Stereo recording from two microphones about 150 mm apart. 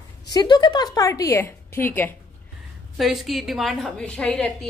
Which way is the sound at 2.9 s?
Centre (ahead or behind).